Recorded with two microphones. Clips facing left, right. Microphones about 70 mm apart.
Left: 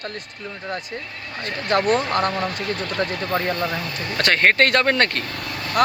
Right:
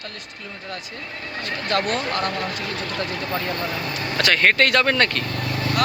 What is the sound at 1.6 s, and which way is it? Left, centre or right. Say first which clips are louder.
Speech: left 4 dB; left.